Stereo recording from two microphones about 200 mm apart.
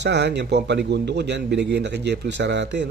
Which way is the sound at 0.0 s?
60° right (ahead or behind).